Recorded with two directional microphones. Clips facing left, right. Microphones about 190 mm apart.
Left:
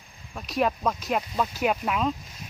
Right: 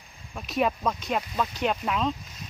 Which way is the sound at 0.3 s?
Centre (ahead or behind).